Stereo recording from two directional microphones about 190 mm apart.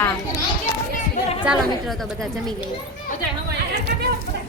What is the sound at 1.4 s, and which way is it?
Speech, centre (ahead or behind).